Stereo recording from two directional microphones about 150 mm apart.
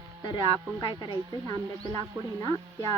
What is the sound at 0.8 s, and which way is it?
Speech, 30° left (ahead or behind).